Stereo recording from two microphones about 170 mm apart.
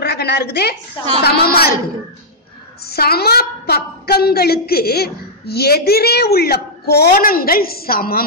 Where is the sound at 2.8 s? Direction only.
65° left (ahead or behind).